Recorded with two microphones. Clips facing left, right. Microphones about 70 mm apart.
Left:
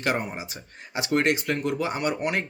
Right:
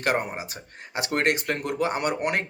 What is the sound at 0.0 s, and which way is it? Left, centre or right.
Speech, right.